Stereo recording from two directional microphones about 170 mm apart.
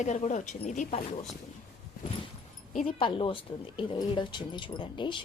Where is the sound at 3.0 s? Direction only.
30° left (ahead or behind).